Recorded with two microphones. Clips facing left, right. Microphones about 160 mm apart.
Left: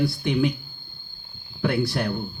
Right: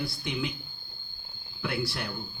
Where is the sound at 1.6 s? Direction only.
55° left (ahead or behind).